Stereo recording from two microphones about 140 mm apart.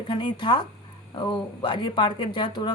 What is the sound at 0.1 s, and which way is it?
Speech, 35° left (ahead or behind).